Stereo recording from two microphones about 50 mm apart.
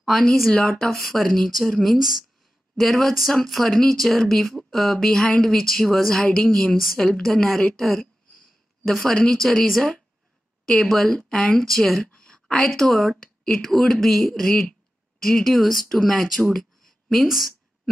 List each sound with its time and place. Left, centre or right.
0.0 s speech: centre
6.2 s a woman's voice: centre
12.1 s a woman's voice: centre